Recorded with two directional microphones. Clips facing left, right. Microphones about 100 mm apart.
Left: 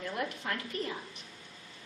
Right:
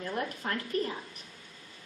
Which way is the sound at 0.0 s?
40° right (ahead or behind).